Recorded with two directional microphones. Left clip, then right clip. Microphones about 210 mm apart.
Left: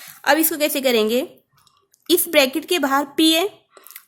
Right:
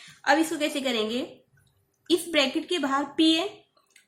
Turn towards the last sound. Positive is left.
turn(degrees=50)  # may be behind; listen again after turning